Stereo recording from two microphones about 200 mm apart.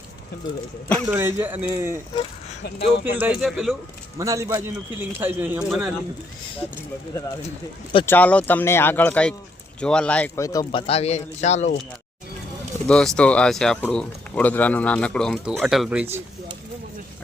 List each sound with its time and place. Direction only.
0.9 s a man's voice: 15° right (ahead or behind)
2.6 s speech: 60° left (ahead or behind)
3.0 s speech: 10° right (ahead or behind)
4.2 s a man's voice: 15° right (ahead or behind)
8.0 s speech: 10° left (ahead or behind); by 11.7 s 35° left (ahead or behind)
12.9 s speech: 5° left (ahead or behind)